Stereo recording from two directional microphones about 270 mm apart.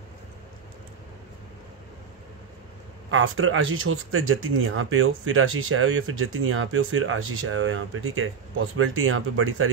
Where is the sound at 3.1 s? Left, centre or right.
Right.